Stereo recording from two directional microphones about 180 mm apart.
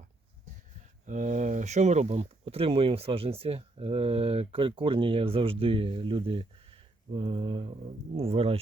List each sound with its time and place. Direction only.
1.0 s speech: 45° right (ahead or behind)